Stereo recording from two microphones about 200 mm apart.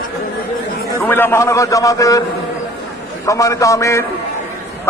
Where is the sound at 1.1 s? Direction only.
10° left (ahead or behind).